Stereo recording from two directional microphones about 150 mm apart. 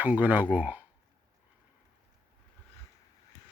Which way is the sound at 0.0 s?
10° right (ahead or behind).